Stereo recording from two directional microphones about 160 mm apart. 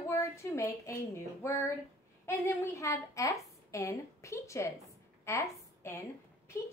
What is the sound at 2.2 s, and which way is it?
A woman's voice, 15° left (ahead or behind).